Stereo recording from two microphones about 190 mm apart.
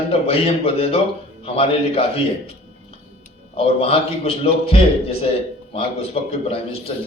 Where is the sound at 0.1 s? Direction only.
30° left (ahead or behind).